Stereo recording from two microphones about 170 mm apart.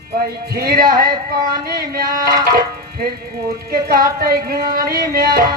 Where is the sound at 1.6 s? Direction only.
60° right (ahead or behind).